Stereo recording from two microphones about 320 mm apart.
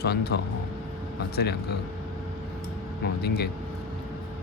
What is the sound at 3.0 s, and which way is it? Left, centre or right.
Speech, left.